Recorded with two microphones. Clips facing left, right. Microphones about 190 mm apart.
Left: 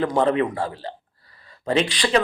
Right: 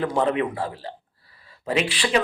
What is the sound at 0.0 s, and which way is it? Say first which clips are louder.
A man's voice: left 2 dB; 5° right (ahead or behind).